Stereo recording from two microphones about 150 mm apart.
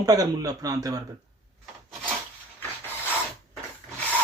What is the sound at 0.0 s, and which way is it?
Speech, 25° right (ahead or behind).